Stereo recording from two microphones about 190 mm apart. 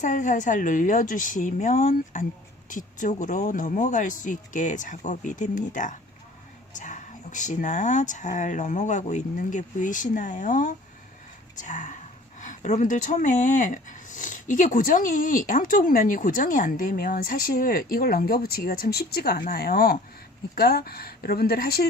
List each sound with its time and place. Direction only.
0.0 s speech: 40° left (ahead or behind)